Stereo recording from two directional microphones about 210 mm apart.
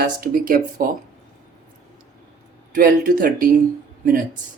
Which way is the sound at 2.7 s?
45° right (ahead or behind).